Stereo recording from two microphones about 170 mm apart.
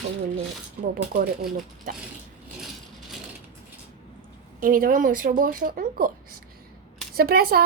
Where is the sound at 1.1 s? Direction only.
55° right (ahead or behind).